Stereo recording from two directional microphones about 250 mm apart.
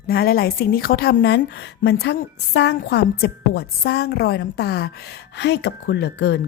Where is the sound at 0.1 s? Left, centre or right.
Left.